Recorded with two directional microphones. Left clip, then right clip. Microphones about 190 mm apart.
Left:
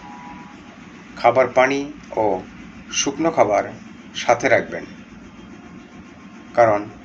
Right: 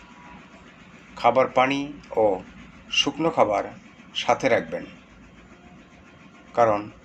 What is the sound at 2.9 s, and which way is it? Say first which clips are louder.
Speech: left 2 dB; 40° right (ahead or behind).